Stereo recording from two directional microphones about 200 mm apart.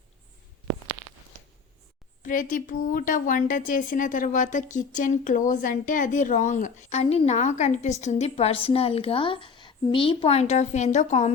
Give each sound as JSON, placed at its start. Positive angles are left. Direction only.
{"t": 2.2, "sound": "a woman's voice", "side_deg": 40}